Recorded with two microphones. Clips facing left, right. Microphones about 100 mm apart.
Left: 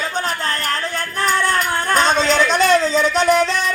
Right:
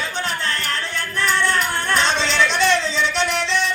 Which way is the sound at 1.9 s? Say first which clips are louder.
Left 5 dB; 45° left (ahead or behind).